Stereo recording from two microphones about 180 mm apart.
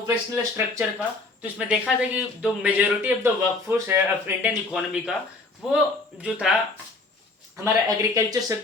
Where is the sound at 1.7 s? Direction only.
5° right (ahead or behind).